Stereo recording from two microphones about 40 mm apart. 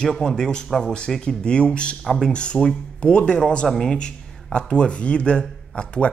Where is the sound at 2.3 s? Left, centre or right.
Left.